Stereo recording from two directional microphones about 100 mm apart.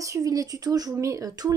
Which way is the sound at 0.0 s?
35° right (ahead or behind).